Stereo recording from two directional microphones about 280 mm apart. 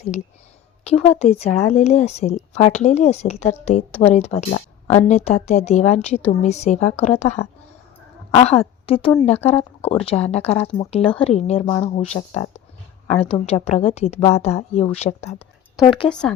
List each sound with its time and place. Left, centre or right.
0.9 s a woman's voice: left
16.0 s speech: centre